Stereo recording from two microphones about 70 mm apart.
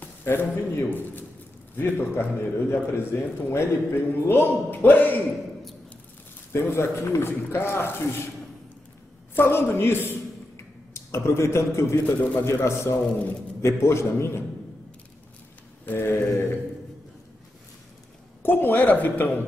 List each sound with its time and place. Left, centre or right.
0.0 s a man's voice: left
6.5 s a man's voice: left
9.3 s a man's voice: left
15.8 s a man's voice: left
18.4 s speech: left